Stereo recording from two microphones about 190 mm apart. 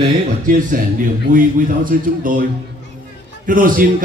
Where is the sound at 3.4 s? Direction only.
45° right (ahead or behind).